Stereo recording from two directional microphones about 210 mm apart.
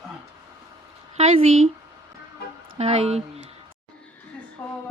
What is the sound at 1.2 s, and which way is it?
Speech, 30° right (ahead or behind).